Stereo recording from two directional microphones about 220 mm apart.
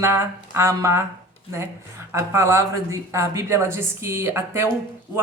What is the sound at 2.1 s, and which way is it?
A woman's voice, 10° right (ahead or behind).